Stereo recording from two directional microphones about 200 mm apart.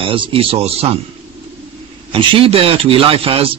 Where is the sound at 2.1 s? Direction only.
25° right (ahead or behind).